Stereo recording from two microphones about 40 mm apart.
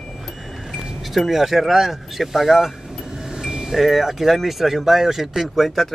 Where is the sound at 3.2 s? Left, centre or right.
Centre.